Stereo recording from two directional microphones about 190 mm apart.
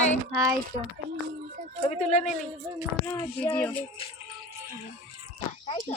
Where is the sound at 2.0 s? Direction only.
35° left (ahead or behind).